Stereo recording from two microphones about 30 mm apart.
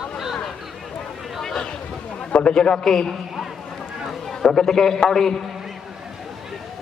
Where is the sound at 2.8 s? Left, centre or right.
Centre.